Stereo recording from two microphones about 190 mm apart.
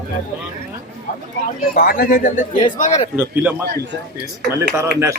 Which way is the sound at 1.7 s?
50° left (ahead or behind).